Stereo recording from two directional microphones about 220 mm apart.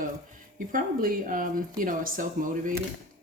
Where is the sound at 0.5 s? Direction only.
40° right (ahead or behind).